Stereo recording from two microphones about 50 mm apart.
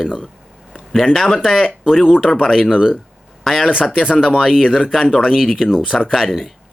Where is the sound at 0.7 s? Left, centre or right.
Centre.